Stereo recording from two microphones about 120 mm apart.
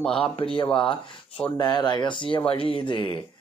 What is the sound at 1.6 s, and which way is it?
Speech, 35° left (ahead or behind).